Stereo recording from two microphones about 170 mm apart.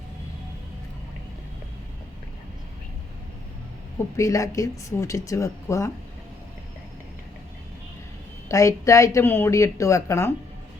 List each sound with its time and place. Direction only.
3.9 s speech: 20° left (ahead or behind)
8.4 s speech: 20° left (ahead or behind)